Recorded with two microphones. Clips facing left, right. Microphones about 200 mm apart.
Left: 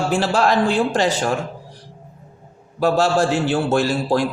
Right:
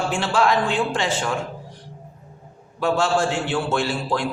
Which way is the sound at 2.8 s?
40° left (ahead or behind).